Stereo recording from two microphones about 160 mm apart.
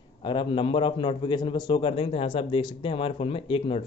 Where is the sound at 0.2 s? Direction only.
30° left (ahead or behind).